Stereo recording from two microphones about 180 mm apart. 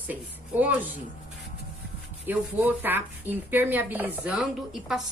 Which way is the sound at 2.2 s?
10° right (ahead or behind).